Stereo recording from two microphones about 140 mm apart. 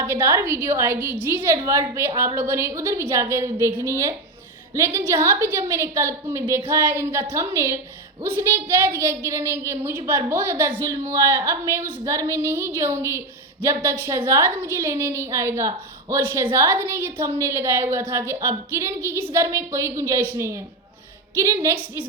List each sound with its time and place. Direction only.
0.0 s a woman's voice: 15° right (ahead or behind)